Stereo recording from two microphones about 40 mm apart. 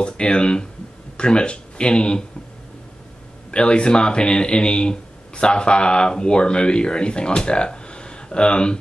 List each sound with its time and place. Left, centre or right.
0.0 s speech: left
3.5 s speech: left